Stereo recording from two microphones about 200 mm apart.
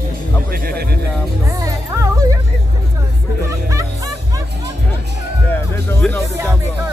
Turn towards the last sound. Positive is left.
turn(degrees=10)  # may be behind; listen again after turning